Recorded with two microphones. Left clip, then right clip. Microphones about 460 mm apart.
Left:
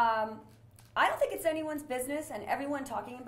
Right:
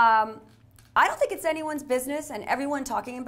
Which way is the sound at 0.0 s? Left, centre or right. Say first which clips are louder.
Right 9 dB; right.